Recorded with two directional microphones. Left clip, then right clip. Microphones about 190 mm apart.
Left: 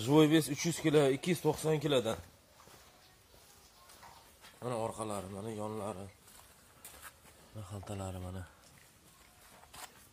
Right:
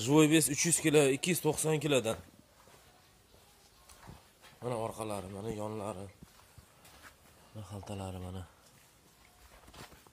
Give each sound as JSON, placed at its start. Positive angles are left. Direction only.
{"t": 0.0, "sound": "speech", "side_deg": -20}
{"t": 4.6, "sound": "speech", "side_deg": -20}
{"t": 7.6, "sound": "a man's voice", "side_deg": -10}